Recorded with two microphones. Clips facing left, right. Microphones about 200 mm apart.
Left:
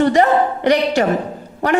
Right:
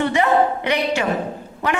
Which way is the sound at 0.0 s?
40° left (ahead or behind).